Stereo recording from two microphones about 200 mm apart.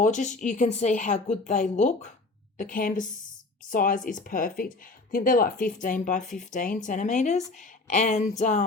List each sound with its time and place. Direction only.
0.0 s speech: 40° left (ahead or behind)